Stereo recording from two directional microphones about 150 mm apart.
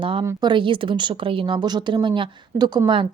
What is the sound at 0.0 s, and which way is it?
A woman's voice, 35° right (ahead or behind).